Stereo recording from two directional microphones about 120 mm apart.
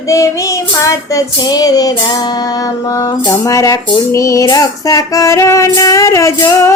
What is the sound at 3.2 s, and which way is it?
Speech, 25° left (ahead or behind).